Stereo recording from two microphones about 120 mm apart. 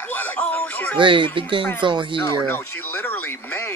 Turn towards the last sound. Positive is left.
turn(degrees=20)  # may be behind; listen again after turning